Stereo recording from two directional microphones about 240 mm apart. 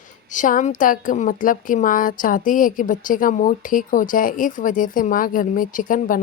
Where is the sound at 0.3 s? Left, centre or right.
Left.